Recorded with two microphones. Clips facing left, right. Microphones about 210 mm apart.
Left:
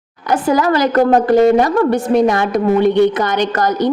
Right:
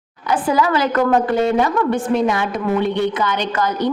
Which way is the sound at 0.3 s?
45° left (ahead or behind).